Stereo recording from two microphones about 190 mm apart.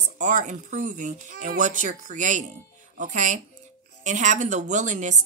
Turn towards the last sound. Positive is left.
turn(degrees=-40)  # may be behind; listen again after turning